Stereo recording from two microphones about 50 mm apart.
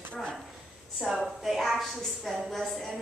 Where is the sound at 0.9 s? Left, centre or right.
Centre.